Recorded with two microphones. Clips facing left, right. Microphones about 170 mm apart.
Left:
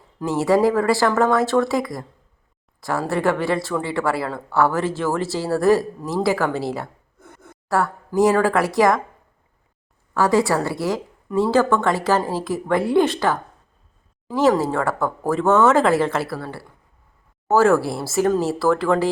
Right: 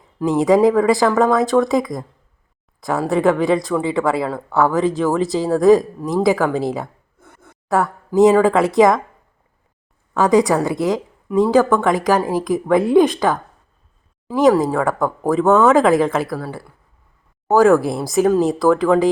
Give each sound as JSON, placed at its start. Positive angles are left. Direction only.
{"t": 0.2, "sound": "speech", "side_deg": -15}
{"t": 10.2, "sound": "speech", "side_deg": -20}